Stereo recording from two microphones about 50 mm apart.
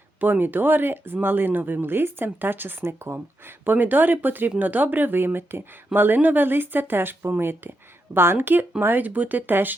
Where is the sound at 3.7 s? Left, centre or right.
Right.